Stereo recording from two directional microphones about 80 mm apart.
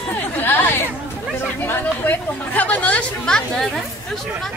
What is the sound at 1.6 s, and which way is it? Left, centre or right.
Speech, left.